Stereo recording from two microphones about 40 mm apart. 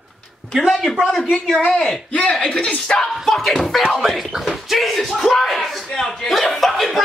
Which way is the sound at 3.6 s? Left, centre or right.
Centre.